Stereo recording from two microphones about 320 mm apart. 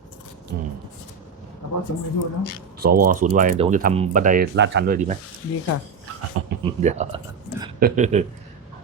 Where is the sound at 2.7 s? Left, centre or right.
Right.